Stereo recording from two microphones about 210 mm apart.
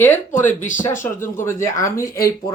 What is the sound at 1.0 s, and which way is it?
Speech, 10° left (ahead or behind).